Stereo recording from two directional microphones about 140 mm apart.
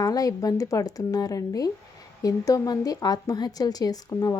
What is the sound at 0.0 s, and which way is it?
Speech, 25° left (ahead or behind).